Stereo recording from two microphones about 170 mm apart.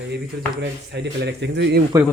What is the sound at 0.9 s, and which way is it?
Speech, 85° right.